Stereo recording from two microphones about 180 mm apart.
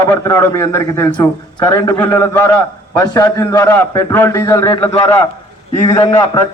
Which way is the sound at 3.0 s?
20° left (ahead or behind).